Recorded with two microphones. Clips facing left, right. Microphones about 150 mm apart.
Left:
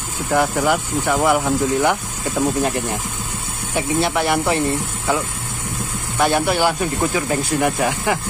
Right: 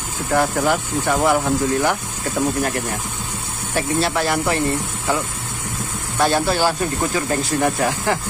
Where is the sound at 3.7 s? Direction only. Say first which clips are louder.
Left 1 dB; 20° left (ahead or behind).